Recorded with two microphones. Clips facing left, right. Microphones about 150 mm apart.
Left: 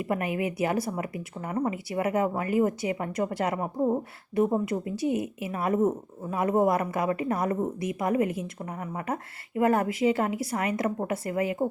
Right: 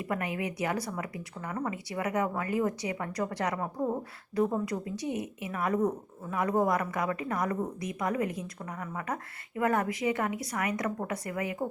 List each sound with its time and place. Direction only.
0.1 s a woman's voice: 25° left (ahead or behind)